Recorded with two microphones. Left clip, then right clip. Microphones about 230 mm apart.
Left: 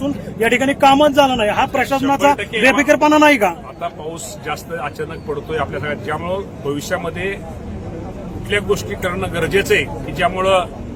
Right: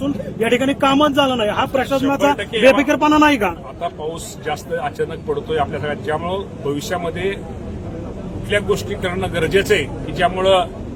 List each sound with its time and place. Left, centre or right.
0.0 s speech: centre
2.2 s speech: centre
2.6 s speech: centre
4.4 s speech: centre
8.4 s speech: centre